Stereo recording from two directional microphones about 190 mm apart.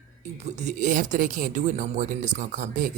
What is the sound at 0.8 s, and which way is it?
Speech, 40° right (ahead or behind).